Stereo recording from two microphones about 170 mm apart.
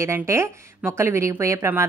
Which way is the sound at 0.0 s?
15° right (ahead or behind).